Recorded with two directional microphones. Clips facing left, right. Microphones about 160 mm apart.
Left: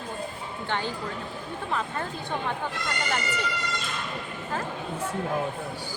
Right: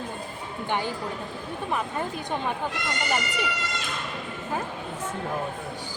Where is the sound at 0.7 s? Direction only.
15° right (ahead or behind).